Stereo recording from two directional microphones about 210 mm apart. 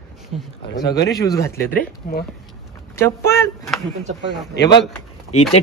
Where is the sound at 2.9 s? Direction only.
10° left (ahead or behind).